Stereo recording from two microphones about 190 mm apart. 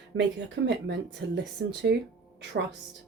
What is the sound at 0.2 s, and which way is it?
Speech, 65° right (ahead or behind).